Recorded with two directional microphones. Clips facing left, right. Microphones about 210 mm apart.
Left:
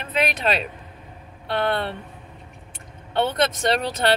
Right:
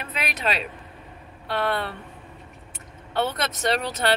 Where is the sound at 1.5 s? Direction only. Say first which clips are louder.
Left 2 dB; 30° left (ahead or behind).